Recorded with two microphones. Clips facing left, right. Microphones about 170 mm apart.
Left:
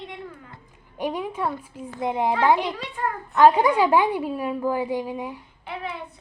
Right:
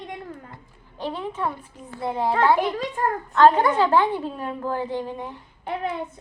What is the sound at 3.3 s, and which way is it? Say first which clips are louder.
A woman's voice: left 1 dB; 10° left (ahead or behind).